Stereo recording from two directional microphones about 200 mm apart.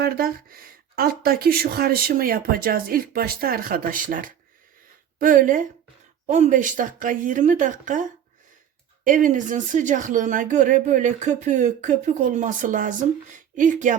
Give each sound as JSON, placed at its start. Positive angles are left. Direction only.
{"t": 0.0, "sound": "speech", "side_deg": -45}
{"t": 9.0, "sound": "speech", "side_deg": -40}